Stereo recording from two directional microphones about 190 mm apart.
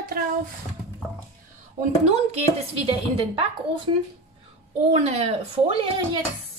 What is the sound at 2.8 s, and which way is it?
Speech, 30° right (ahead or behind).